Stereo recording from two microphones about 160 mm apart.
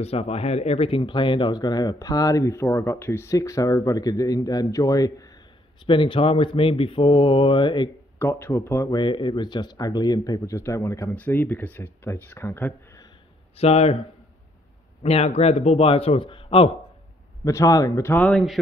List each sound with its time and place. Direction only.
0.0 s speech: 40° left (ahead or behind); by 5.4 s 20° left (ahead or behind)
5.9 s a man's voice: 30° left (ahead or behind)
8.2 s speech: 15° left (ahead or behind)
9.0 s speech: 30° left (ahead or behind)
13.6 s a man's voice: 40° left (ahead or behind)
15.0 s a man's voice: 40° left (ahead or behind)
17.5 s speech: 20° left (ahead or behind)
18.2 s speech: centre (ahead or behind)